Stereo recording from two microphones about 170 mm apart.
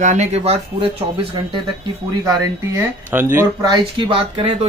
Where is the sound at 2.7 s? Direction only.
15° right (ahead or behind).